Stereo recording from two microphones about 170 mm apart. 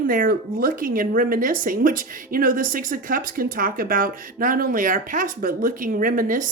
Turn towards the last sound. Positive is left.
turn(degrees=-55)  # may be behind; listen again after turning